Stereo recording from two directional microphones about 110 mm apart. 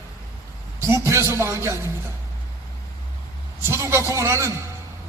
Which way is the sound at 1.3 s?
25° right (ahead or behind).